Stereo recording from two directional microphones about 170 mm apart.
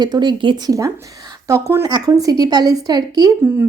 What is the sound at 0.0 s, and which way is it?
A woman's voice, 25° right (ahead or behind).